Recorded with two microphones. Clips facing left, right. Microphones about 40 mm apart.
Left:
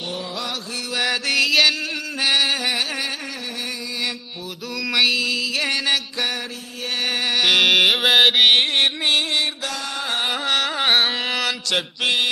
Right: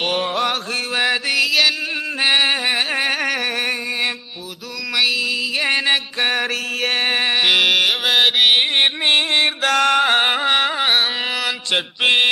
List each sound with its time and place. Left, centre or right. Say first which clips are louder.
0.0 s mantra: right 9 dB; right
0.9 s mantra: right 3 dB; right
1.3 s mantra: left 2 dB; centre
2.2 s music: right 3 dB; right
4.9 s mantra: even; centre
5.7 s music: right 4 dB; right
6.8 s music: right 4 dB; right
7.5 s music: left 4 dB; centre
8.7 s music: right 3 dB; right
9.6 s music: right 12 dB; right
10.4 s carnatic music: right 4 dB; right
10.8 s carnatic music: right 1 dB; centre
11.7 s mantra: right 7 dB; right